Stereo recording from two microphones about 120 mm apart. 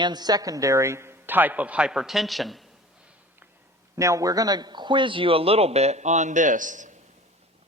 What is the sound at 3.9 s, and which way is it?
A man's voice, 25° right (ahead or behind).